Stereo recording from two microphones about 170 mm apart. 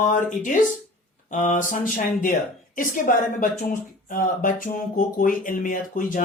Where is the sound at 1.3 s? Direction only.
50° left (ahead or behind).